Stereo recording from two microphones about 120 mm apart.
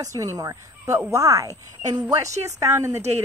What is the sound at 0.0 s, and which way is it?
Speech, 30° right (ahead or behind).